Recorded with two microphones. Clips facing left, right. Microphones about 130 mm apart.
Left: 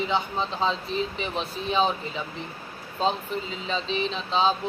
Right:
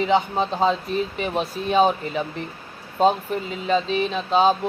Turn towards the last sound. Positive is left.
turn(degrees=-50)  # may be behind; listen again after turning